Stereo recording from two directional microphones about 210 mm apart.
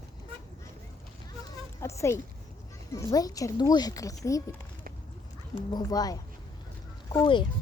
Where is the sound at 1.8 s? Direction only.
15° left (ahead or behind).